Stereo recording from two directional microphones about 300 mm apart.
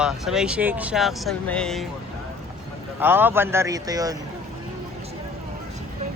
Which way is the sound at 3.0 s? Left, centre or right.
Centre.